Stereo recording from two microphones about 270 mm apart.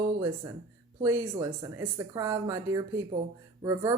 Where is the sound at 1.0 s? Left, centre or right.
Centre.